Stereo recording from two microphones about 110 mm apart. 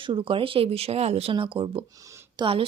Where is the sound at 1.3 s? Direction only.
50° right (ahead or behind).